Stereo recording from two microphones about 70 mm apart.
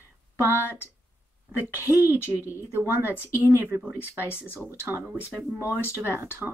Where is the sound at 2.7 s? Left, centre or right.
Right.